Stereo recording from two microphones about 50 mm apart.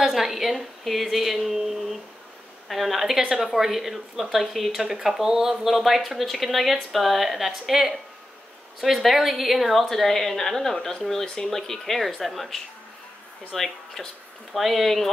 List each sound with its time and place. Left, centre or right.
0.0 s a woman's voice: centre